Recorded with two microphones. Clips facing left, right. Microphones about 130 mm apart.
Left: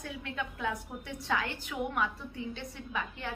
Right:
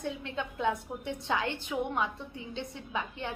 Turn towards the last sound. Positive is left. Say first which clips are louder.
# right 2 dB
turn(degrees=-20)  # may be behind; listen again after turning